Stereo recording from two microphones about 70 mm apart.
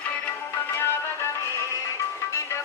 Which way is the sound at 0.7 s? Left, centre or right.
Left.